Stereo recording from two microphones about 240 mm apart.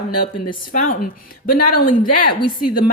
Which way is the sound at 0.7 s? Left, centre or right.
Left.